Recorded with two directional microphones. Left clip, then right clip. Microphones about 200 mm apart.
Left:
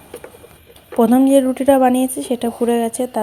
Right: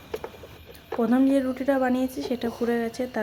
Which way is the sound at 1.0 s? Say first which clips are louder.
Left 10 dB; 25° left (ahead or behind).